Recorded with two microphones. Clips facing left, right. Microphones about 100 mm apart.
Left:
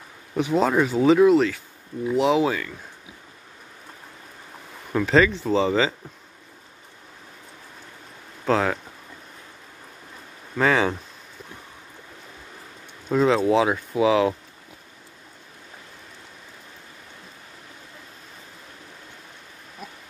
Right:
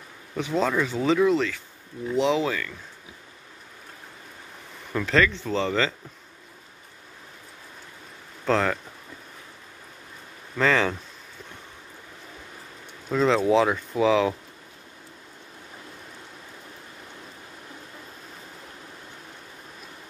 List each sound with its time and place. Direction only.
0.4 s speech: 15° left (ahead or behind)
4.9 s speech: 15° left (ahead or behind)
8.5 s speech: 5° left (ahead or behind)
10.6 s speech: 10° left (ahead or behind)
13.1 s speech: 10° left (ahead or behind)